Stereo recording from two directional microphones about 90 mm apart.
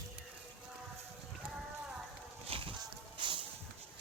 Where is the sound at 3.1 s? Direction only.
70° right (ahead or behind).